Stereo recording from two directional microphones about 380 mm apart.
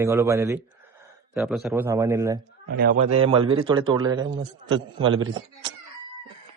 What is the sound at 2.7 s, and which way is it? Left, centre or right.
A man's voice, right.